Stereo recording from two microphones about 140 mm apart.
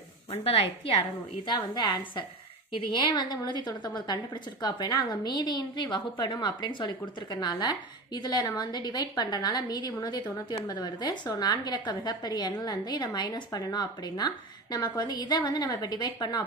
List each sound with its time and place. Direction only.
0.3 s a woman's voice: 45° left (ahead or behind)
1.4 s a woman's voice: 30° left (ahead or behind)